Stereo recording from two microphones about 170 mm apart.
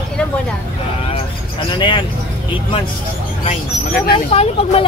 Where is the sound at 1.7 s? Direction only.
30° left (ahead or behind).